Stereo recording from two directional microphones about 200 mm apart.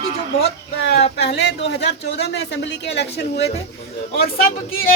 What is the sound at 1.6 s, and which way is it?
Speech, 60° left (ahead or behind).